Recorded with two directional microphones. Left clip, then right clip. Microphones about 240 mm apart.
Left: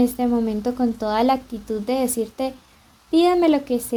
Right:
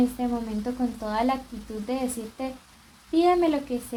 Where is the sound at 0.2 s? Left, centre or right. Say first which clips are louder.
Left 8 dB; left.